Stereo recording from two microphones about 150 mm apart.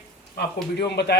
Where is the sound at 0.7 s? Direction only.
90° left.